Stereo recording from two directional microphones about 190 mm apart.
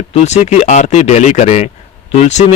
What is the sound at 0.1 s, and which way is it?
Speech, 35° left (ahead or behind).